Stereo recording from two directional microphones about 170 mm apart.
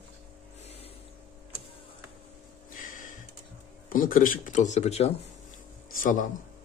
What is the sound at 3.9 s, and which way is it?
Speech, 55° left (ahead or behind).